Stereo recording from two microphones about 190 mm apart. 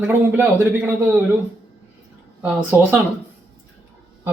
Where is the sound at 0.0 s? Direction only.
10° right (ahead or behind).